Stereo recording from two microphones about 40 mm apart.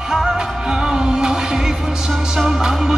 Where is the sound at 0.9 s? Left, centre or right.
Centre.